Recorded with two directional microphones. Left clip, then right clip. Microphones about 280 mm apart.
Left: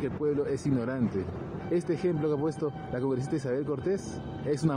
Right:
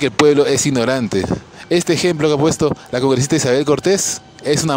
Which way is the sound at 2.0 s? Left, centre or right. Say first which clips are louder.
Right 14 dB; right.